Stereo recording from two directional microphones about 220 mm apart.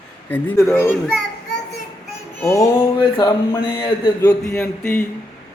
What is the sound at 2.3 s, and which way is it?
Speech, 15° left (ahead or behind).